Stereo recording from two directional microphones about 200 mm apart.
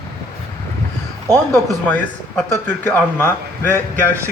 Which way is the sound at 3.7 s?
15° right (ahead or behind).